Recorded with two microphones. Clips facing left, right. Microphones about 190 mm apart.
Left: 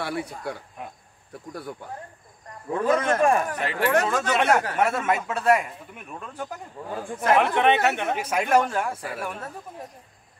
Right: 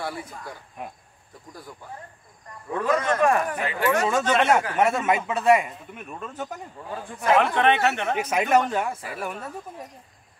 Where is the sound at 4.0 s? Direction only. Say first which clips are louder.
Right 1 dB; centre (ahead or behind).